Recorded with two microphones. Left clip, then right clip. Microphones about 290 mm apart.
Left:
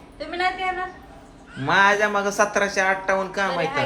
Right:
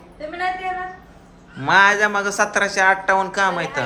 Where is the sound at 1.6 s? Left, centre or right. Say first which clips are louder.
Right 3 dB; centre.